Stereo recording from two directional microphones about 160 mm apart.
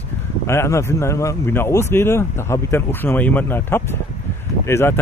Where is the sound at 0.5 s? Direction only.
15° left (ahead or behind).